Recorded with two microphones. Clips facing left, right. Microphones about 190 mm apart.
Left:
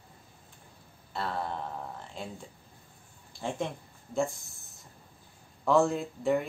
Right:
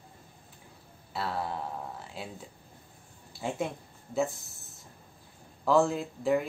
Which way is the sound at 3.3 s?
5° right (ahead or behind).